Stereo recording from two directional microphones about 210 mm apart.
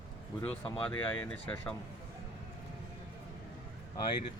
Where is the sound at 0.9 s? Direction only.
5° left (ahead or behind).